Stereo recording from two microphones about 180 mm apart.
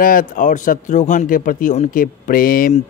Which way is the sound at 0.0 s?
50° left (ahead or behind).